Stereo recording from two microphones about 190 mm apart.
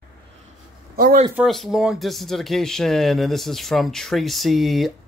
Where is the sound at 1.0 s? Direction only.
50° right (ahead or behind).